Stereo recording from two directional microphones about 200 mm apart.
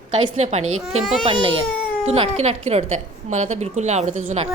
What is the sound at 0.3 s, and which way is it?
Speech, 35° right (ahead or behind).